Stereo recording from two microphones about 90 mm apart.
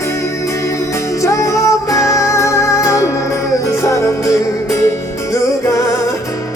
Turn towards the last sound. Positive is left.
turn(degrees=35)  # may be behind; listen again after turning